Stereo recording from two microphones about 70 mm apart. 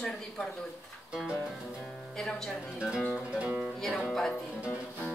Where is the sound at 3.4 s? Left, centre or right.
Right.